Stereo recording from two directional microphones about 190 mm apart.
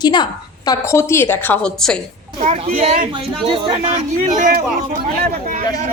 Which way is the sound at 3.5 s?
25° right (ahead or behind).